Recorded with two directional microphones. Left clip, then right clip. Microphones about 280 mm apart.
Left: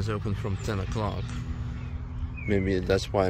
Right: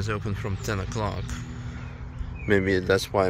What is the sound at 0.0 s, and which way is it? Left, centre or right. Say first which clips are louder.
Speech: right 2 dB; centre.